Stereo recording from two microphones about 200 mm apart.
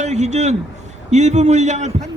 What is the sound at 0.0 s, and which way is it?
A man's voice, 35° right (ahead or behind).